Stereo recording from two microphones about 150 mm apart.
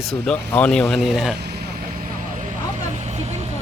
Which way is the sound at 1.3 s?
90° right.